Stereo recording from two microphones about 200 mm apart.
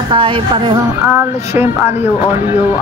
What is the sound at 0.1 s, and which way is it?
Speech, 25° right (ahead or behind).